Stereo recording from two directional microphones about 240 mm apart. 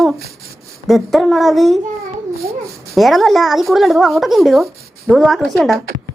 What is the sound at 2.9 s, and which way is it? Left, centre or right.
Speech, centre.